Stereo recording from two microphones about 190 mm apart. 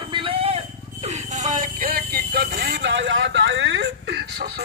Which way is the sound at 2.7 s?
70° right (ahead or behind).